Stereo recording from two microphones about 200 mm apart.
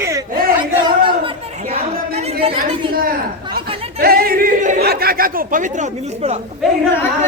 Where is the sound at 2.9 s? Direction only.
45° right (ahead or behind).